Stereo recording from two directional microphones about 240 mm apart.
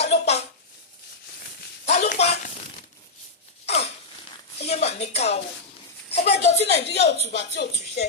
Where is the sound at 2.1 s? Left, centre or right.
Left.